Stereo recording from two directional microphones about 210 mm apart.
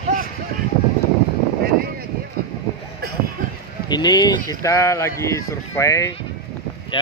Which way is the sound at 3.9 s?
20° left (ahead or behind).